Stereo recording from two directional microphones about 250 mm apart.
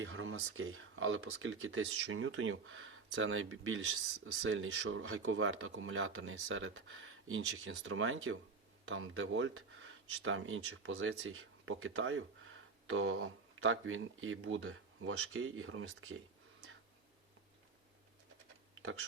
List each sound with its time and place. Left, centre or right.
0.0 s speech: right
18.7 s tick-tock: right